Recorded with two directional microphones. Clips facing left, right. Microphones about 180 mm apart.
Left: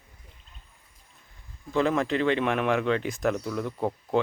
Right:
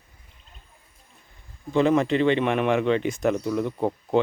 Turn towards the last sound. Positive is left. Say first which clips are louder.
# right 3 dB
turn(degrees=-25)  # may be behind; listen again after turning